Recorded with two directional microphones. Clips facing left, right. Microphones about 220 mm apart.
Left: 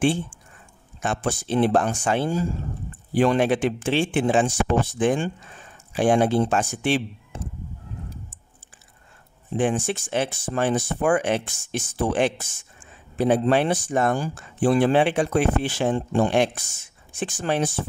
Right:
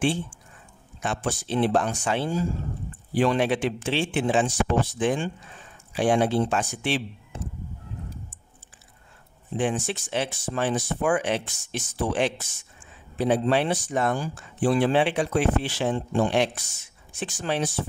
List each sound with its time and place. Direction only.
1.0 s speech: 50° left (ahead or behind)
9.6 s speech: 50° left (ahead or behind)